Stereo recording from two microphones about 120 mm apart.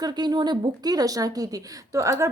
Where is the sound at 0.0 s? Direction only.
35° right (ahead or behind).